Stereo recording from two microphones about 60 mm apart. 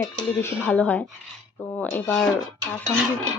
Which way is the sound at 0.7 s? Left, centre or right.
Left.